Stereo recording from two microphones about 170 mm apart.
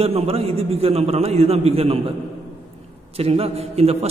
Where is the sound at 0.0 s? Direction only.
35° right (ahead or behind).